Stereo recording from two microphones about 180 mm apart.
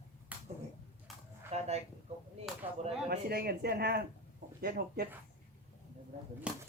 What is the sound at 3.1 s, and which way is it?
Speech, 60° right (ahead or behind).